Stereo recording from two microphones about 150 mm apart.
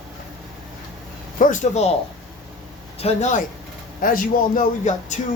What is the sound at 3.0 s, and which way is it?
Speech, 45° left (ahead or behind).